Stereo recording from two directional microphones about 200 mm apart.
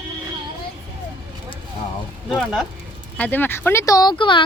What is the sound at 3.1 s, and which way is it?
Speech, 10° left (ahead or behind).